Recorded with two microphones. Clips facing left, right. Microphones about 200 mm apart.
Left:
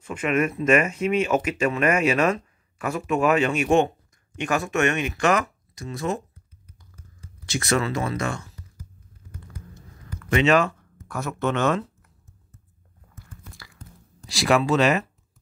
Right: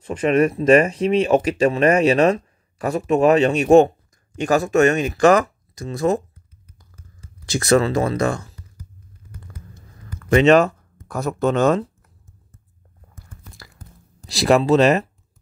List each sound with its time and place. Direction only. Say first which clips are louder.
0.0 s speech: right 6 dB; 35° right (ahead or behind)
7.4 s speech: right 7 dB; 35° right (ahead or behind)
10.3 s speech: right 6 dB; 40° right (ahead or behind)
14.3 s speech: right 5 dB; 35° right (ahead or behind)